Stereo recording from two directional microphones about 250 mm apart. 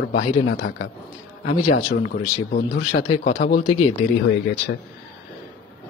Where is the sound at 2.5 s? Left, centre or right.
Left.